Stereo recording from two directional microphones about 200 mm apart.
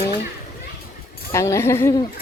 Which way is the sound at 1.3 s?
15° left (ahead or behind).